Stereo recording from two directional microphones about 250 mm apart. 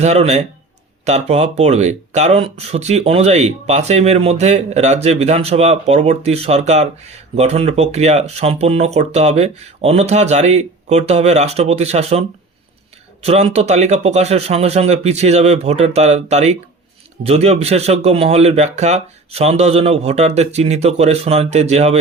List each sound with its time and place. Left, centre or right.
0.0 s speech: right
13.2 s speech: right